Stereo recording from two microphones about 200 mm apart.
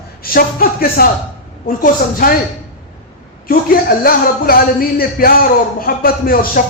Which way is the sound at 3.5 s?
50° left (ahead or behind).